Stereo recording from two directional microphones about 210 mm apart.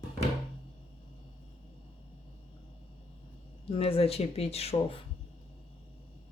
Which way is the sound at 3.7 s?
25° left (ahead or behind).